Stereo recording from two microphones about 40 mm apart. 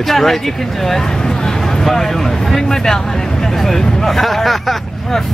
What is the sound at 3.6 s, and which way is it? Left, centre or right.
Speech, centre.